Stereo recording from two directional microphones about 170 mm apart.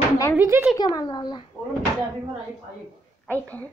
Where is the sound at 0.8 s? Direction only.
25° left (ahead or behind).